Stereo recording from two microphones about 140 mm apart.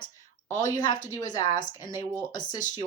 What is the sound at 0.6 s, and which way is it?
A woman's voice, 30° left (ahead or behind).